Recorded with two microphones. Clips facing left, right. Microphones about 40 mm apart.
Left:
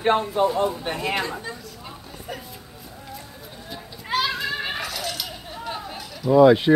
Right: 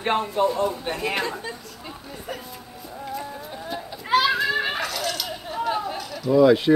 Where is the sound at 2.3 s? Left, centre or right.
Centre.